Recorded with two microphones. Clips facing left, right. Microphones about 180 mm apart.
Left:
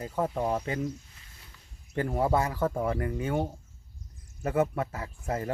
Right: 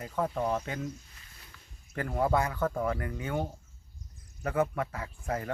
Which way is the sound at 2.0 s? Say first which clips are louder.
Left 2 dB; 25° left (ahead or behind).